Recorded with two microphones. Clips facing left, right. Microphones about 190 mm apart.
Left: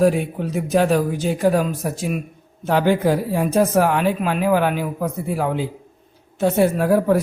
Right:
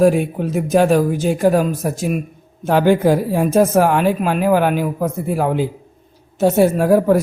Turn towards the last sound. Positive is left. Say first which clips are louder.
# right 3 dB
turn(degrees=-45)  # may be behind; listen again after turning